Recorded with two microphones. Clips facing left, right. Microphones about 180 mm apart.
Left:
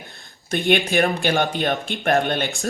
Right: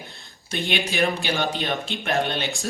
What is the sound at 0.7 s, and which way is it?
Speech, 55° left (ahead or behind).